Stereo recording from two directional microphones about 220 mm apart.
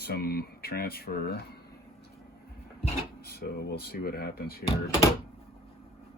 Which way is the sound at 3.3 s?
45° left (ahead or behind).